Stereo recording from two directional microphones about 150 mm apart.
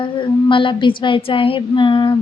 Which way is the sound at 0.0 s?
35° left (ahead or behind).